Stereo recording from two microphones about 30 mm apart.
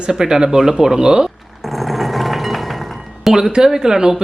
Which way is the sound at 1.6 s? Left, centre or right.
Centre.